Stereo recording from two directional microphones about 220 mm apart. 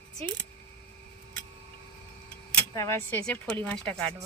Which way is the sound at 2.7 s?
15° left (ahead or behind).